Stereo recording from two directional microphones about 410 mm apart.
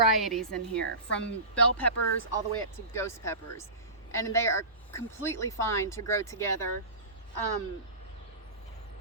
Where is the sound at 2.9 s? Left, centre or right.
Centre.